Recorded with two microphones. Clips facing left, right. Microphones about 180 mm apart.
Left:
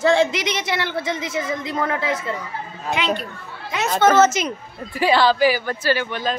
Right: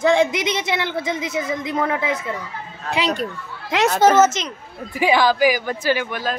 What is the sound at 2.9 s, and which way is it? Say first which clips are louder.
Speech: right 1 dB; 35° right (ahead or behind).